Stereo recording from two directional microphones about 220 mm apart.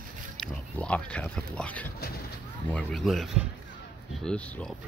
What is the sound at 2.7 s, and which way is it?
Speech, centre (ahead or behind).